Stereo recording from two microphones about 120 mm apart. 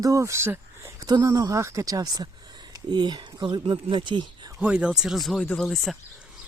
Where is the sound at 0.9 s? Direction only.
35° right (ahead or behind).